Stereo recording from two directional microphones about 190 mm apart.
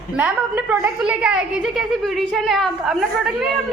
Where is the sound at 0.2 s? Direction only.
10° right (ahead or behind).